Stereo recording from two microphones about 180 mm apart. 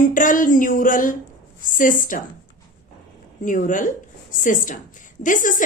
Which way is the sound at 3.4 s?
45° left (ahead or behind).